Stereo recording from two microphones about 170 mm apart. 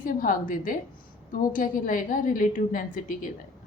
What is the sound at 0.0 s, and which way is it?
A woman's voice, 55° left (ahead or behind).